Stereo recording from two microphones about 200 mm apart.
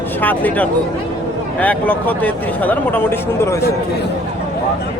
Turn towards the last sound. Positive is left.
turn(degrees=10)  # may be behind; listen again after turning